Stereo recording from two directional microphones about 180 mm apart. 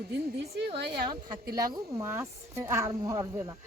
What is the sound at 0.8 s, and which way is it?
Speech, 60° right (ahead or behind).